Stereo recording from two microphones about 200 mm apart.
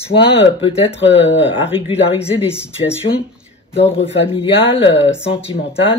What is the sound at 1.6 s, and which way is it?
Speech, 25° left (ahead or behind).